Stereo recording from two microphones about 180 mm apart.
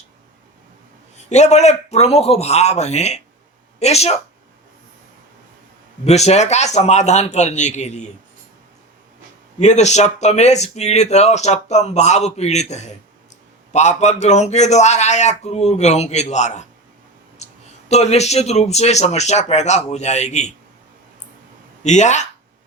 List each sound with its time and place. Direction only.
1.1 s speech: 40° left (ahead or behind)
6.1 s speech: 40° left (ahead or behind)
9.6 s speech: 40° left (ahead or behind)
21.8 s speech: 40° left (ahead or behind)